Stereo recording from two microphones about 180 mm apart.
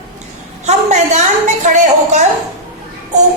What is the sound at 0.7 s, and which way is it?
A woman's voice, 40° right (ahead or behind).